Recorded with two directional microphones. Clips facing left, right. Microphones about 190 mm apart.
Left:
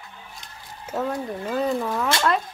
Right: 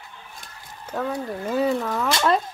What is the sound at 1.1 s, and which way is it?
Speech, 5° right (ahead or behind).